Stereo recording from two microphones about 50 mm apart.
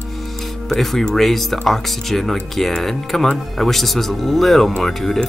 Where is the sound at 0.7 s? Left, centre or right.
Centre.